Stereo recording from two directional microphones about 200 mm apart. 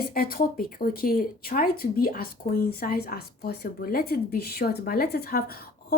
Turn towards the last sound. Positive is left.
turn(degrees=50)  # may be behind; listen again after turning